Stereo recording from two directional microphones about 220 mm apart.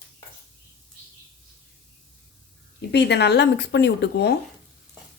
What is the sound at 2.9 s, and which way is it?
Speech, 50° left (ahead or behind).